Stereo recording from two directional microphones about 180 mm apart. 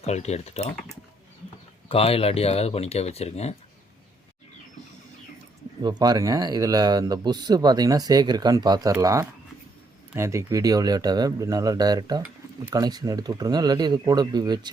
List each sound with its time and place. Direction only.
0.0 s speech: 35° left (ahead or behind)
1.9 s speech: 35° left (ahead or behind)
5.8 s speech: 20° right (ahead or behind)